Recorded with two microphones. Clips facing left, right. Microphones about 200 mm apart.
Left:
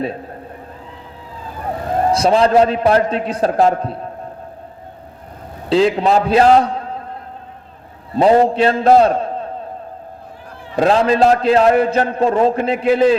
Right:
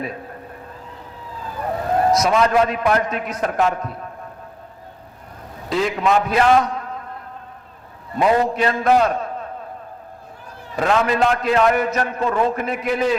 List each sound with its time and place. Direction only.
2.1 s a man's voice: 30° left (ahead or behind)
5.6 s a man's voice: 30° left (ahead or behind)
8.1 s a man's voice: 30° left (ahead or behind)
10.8 s a man's voice: 30° left (ahead or behind)